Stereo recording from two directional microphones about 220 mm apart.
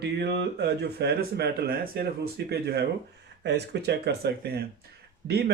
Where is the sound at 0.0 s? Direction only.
50° right (ahead or behind).